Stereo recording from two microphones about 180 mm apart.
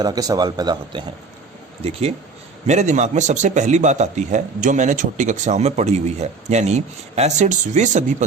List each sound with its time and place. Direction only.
0.0 s speech: 20° right (ahead or behind)
1.8 s a man's voice: 35° right (ahead or behind)